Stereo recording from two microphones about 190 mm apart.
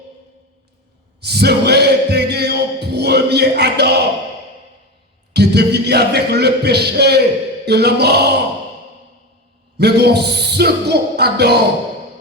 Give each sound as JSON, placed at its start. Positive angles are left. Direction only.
{"t": 1.2, "sound": "music", "side_deg": -60}
{"t": 5.3, "sound": "music", "side_deg": -60}
{"t": 9.7, "sound": "music", "side_deg": -60}